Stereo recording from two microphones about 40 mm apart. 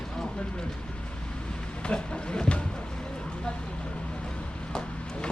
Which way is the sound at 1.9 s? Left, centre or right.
Left.